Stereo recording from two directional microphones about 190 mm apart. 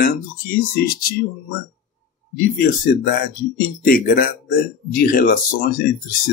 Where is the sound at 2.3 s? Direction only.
50° left (ahead or behind).